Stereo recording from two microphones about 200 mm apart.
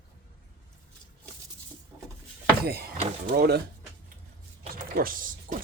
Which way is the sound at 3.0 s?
45° right (ahead or behind).